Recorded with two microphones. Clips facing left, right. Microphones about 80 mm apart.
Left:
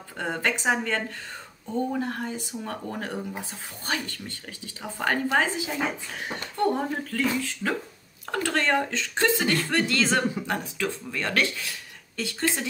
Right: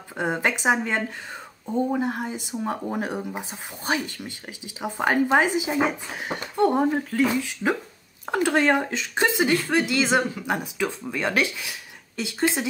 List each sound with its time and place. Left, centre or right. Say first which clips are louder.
0.2 s speech: right 3 dB; centre